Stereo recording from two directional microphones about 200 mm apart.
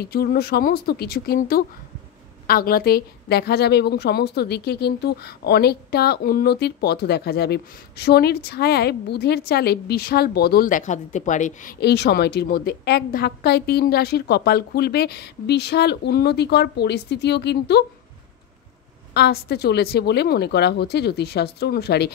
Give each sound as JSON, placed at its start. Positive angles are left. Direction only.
{"t": 0.0, "sound": "a woman's voice", "side_deg": 50}
{"t": 11.8, "sound": "a woman's voice", "side_deg": 55}
{"t": 19.1, "sound": "a woman's voice", "side_deg": 55}